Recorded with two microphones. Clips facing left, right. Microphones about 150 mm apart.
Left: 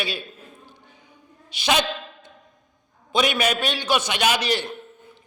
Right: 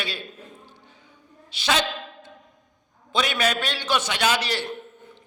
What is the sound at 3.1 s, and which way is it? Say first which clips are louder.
Mantra: left 2 dB; 15° left (ahead or behind).